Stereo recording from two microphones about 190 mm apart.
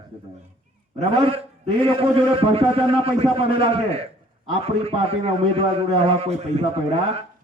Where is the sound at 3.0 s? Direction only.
30° right (ahead or behind).